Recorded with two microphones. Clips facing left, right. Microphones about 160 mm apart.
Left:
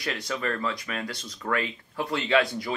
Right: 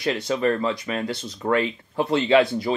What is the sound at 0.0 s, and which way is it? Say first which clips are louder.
Speech: right 8 dB; 25° right (ahead or behind).